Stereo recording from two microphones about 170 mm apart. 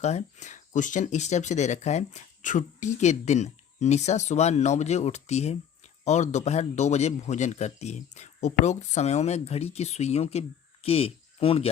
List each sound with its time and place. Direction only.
0.0 s speech: 40° left (ahead or behind)